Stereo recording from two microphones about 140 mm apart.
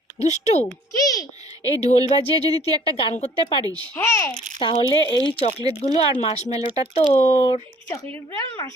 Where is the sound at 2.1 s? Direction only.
30° right (ahead or behind).